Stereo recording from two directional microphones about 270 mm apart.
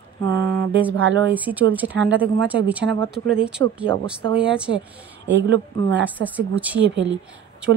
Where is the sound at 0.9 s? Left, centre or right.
Right.